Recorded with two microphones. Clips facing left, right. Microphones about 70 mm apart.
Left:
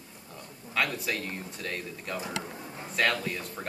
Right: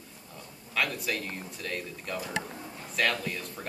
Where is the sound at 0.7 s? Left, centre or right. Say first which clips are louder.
Left 1 dB; centre.